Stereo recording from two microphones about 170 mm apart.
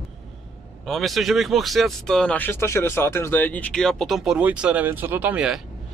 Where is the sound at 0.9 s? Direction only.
Centre (ahead or behind).